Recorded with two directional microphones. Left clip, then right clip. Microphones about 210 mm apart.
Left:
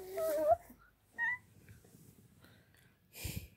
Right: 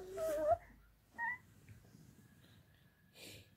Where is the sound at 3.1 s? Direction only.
40° left (ahead or behind).